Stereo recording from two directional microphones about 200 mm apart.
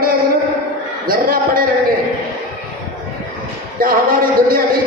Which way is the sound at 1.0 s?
45° right (ahead or behind).